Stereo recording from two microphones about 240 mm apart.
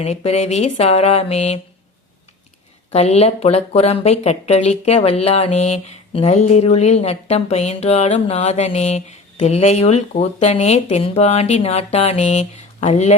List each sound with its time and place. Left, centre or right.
0.0 s speech: left
2.9 s speech: left